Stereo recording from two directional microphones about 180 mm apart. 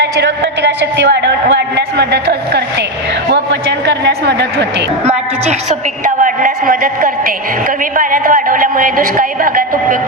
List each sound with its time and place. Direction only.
0.0 s a man's voice: 75° right (ahead or behind)
6.2 s a man's voice: 50° right (ahead or behind)